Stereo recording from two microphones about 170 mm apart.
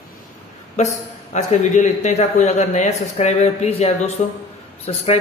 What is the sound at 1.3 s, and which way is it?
A man's voice, 45° left (ahead or behind).